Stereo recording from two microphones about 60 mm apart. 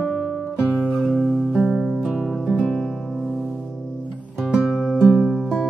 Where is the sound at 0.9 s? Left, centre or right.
Centre.